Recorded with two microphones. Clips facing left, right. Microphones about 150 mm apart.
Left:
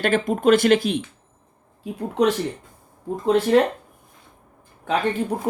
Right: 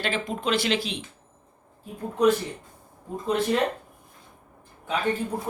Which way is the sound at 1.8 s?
90° left.